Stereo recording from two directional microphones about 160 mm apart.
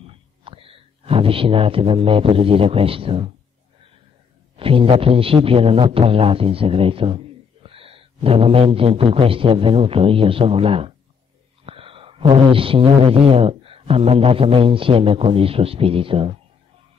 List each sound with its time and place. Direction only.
0.0 s speech: 35° right (ahead or behind)
4.6 s speech: 35° right (ahead or behind)